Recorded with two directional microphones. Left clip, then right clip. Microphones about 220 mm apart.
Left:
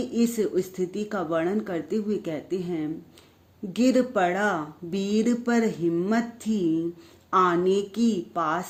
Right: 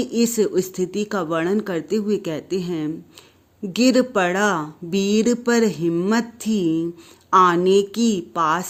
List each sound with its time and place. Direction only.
0.0 s speech: 40° right (ahead or behind)